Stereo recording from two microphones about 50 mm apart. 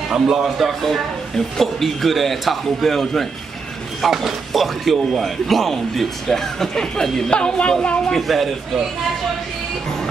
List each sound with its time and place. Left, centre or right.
0.1 s a man's voice: centre; by 7.7 s left
8.1 s a man's voice: centre